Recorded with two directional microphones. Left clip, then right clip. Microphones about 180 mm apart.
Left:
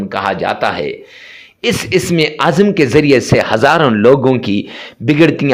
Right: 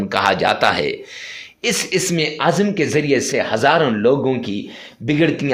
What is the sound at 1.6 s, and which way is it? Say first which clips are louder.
A man's voice: left 5 dB; 30° left (ahead or behind).